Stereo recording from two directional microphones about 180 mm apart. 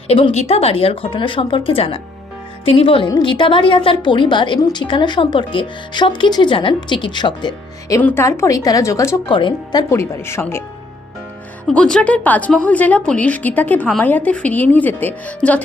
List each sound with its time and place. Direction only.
0.1 s a woman's voice: 35° left (ahead or behind)
8.0 s a woman's voice: 15° left (ahead or behind)
9.9 s a woman's voice: 15° left (ahead or behind)
11.7 s a woman's voice: 5° left (ahead or behind)